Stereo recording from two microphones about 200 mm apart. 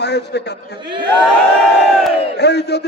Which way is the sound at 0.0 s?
55° left (ahead or behind).